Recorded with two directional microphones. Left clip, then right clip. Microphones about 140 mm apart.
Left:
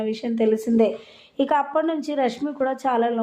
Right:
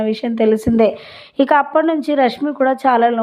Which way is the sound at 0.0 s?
30° right (ahead or behind).